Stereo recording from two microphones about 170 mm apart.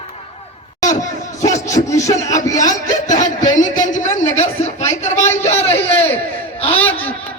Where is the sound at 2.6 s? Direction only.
45° left (ahead or behind).